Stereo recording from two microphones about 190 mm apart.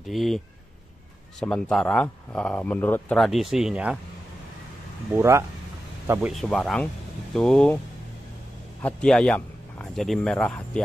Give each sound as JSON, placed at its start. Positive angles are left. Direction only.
{"t": 0.0, "sound": "speech", "side_deg": 0}
{"t": 1.4, "sound": "speech", "side_deg": 5}
{"t": 5.1, "sound": "speech", "side_deg": -15}
{"t": 6.5, "sound": "speech", "side_deg": 5}
{"t": 8.8, "sound": "speech", "side_deg": 5}